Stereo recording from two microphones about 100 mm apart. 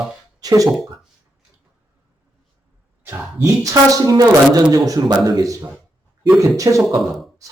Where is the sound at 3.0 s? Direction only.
20° right (ahead or behind).